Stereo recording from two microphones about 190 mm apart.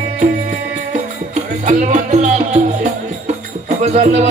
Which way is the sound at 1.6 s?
40° right (ahead or behind).